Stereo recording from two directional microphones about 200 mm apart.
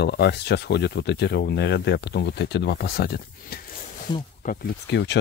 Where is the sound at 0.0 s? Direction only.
55° left (ahead or behind).